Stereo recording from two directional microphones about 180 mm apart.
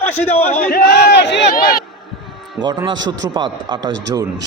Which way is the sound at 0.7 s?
65° left (ahead or behind).